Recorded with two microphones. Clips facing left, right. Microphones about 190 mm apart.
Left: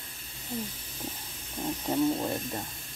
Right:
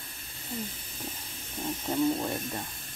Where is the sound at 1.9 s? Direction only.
10° left (ahead or behind).